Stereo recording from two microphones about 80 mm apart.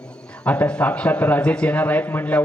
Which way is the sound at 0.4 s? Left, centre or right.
Centre.